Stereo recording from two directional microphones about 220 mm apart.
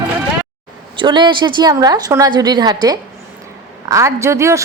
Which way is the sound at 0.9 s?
20° right (ahead or behind).